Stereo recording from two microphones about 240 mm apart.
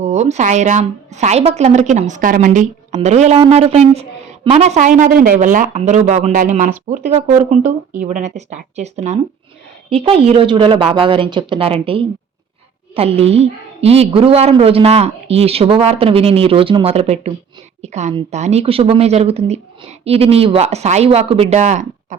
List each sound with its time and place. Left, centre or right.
0.0 s a woman's voice: right